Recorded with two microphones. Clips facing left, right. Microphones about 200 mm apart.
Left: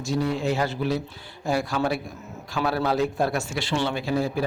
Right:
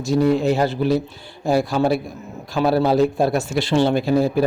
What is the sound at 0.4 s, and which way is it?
A man's voice, 35° right (ahead or behind).